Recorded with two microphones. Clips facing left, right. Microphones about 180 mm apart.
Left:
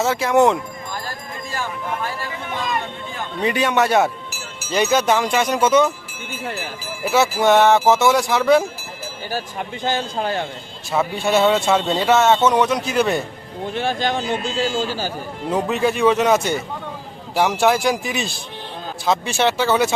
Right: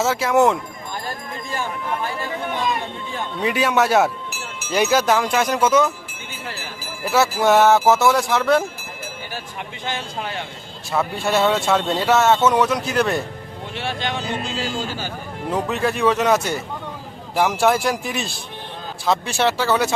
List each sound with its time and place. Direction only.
0.0 s speech: centre (ahead or behind)
3.4 s speech: 5° right (ahead or behind)
7.0 s speech: 5° left (ahead or behind)
9.3 s speech: 35° left (ahead or behind)
10.9 s speech: centre (ahead or behind)
13.7 s speech: 35° left (ahead or behind)
15.7 s speech: centre (ahead or behind)